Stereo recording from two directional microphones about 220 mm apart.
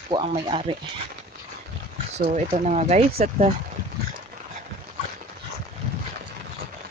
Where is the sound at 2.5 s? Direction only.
30° right (ahead or behind).